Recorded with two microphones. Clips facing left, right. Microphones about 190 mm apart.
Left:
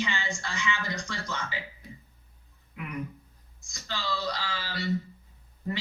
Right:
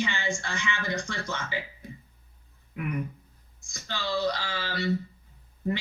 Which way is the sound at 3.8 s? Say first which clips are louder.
Right 4 dB; 55° right (ahead or behind).